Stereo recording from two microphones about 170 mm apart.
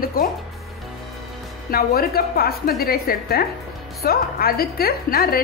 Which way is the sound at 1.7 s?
60° left (ahead or behind).